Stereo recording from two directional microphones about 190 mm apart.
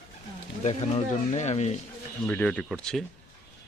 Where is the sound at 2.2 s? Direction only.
5° left (ahead or behind).